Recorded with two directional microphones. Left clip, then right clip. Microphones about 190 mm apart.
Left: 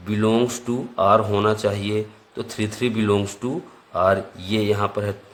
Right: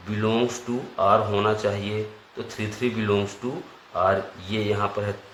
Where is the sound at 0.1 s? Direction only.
50° left (ahead or behind).